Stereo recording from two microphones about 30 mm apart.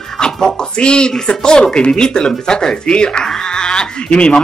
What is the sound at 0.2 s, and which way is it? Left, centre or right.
Speech, left.